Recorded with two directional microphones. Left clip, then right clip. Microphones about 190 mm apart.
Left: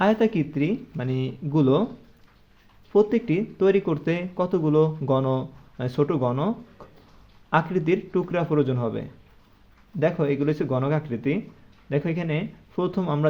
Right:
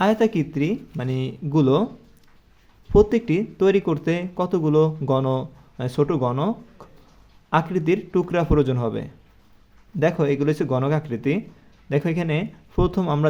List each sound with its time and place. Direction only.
0.0 s speech: 10° right (ahead or behind)
2.9 s speech: 20° right (ahead or behind)